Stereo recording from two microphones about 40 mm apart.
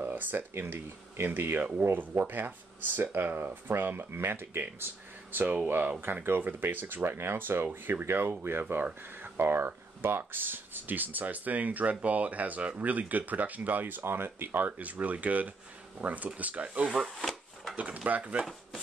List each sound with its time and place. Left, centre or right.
0.0 s a sound: right
0.6 s speech: right
1.8 s speech: right
3.7 s speech: right
5.3 s speech: right
6.2 s speech: right
8.5 s speech: right
9.4 s speech: right
9.7 s speech: right
14.0 s speech: right
14.8 s speech: right
16.6 s speech: right
17.1 s wood: centre
17.7 s speech: right